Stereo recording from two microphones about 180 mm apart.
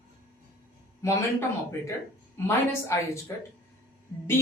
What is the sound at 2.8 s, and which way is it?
Speech, 15° left (ahead or behind).